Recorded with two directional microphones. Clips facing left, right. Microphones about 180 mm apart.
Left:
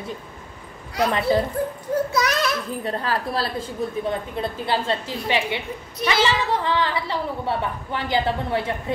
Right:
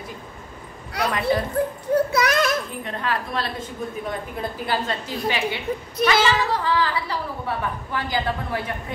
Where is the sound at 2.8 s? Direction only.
35° left (ahead or behind).